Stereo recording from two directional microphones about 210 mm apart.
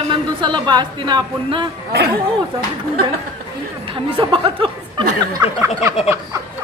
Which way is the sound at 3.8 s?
25° right (ahead or behind).